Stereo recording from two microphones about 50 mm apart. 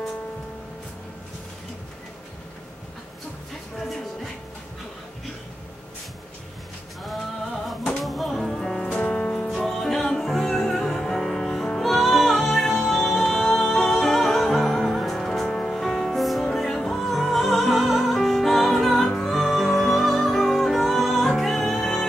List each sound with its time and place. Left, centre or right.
8.0 s music: centre
9.2 s music: left
9.7 s music: centre
15.4 s music: centre